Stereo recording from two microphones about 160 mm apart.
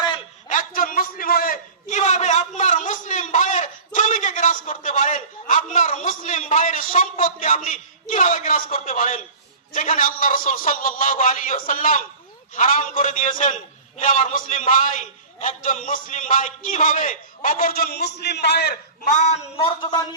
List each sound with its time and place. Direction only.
0.4 s a sound: 55° left (ahead or behind)
5.7 s a man's voice: 50° left (ahead or behind); by 19.1 s 90° left
19.1 s a man's voice: 45° left (ahead or behind)
19.8 s a man's voice: 25° left (ahead or behind)